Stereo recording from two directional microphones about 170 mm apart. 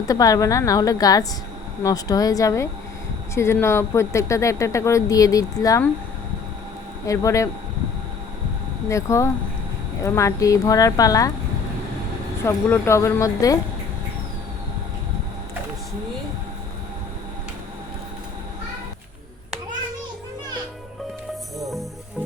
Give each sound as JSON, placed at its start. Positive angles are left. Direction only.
{"t": 0.1, "sound": "a woman's voice", "side_deg": 20}
{"t": 7.0, "sound": "a woman's voice", "side_deg": 20}
{"t": 8.9, "sound": "a woman's voice", "side_deg": 15}
{"t": 12.5, "sound": "speech", "side_deg": 15}
{"t": 21.6, "sound": "music", "side_deg": 0}